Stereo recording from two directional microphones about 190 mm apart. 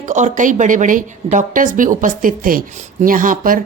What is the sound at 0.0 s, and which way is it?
A woman's voice, 40° right (ahead or behind).